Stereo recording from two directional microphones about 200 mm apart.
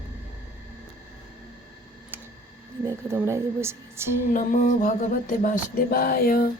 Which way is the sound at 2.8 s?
15° right (ahead or behind).